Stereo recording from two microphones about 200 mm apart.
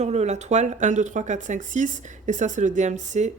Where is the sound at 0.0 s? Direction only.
35° right (ahead or behind).